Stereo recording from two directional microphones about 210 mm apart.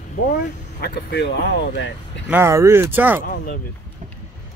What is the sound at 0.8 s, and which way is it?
Speech, 55° left (ahead or behind).